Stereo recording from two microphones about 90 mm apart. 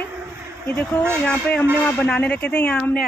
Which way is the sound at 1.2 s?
15° left (ahead or behind).